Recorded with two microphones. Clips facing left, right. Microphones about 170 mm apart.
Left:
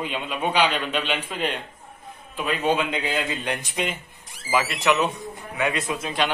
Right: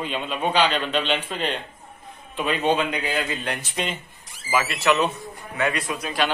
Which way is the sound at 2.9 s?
25° left (ahead or behind).